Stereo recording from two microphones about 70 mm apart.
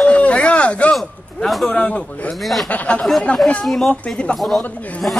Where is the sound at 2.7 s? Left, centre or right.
Centre.